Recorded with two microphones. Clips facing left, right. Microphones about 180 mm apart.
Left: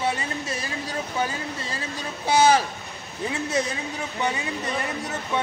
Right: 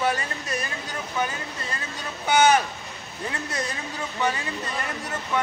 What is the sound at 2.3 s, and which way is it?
Speech, 30° left (ahead or behind).